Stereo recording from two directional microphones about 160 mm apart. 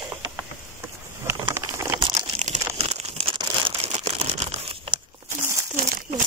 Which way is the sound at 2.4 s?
45° right (ahead or behind).